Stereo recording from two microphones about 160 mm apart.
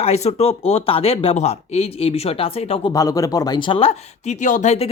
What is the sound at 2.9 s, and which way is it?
Speech, 20° left (ahead or behind).